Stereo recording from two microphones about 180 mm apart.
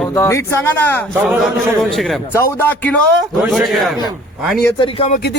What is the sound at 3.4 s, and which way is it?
Speech, centre (ahead or behind).